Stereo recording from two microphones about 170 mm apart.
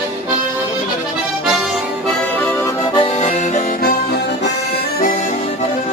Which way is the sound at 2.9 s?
35° left (ahead or behind).